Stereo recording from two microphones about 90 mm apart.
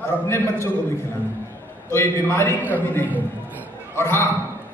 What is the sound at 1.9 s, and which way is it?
A man's voice, 30° left (ahead or behind).